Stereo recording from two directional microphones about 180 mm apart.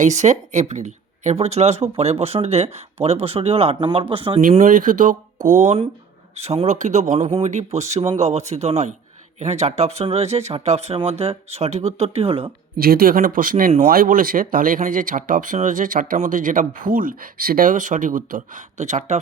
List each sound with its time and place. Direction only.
0.0 s speech: 40° right (ahead or behind)
4.5 s speech: 50° right (ahead or behind); by 12.5 s 30° right (ahead or behind)
12.7 s speech: 55° right (ahead or behind)